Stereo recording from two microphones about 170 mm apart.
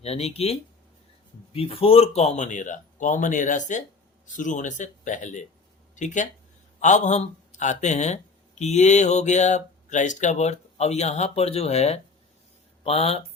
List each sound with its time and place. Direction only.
0.0 s speech: 35° left (ahead or behind)
1.5 s speech: 35° left (ahead or behind)
6.7 s speech: 45° left (ahead or behind)